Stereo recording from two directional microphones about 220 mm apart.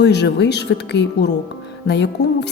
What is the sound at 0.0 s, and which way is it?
A woman's voice, 50° left (ahead or behind).